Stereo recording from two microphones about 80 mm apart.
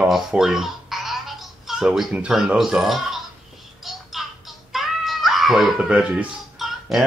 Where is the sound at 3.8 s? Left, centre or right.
Centre.